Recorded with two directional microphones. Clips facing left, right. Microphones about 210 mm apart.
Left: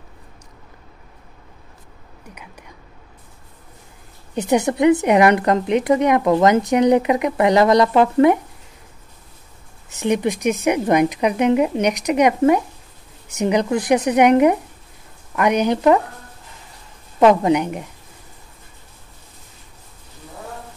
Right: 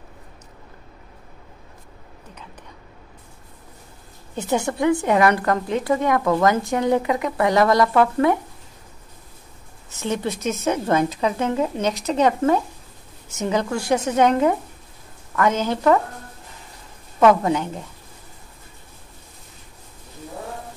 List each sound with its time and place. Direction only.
4.4 s a woman's voice: 20° left (ahead or behind)
9.8 s a woman's voice: 15° left (ahead or behind)
17.2 s a woman's voice: 20° left (ahead or behind)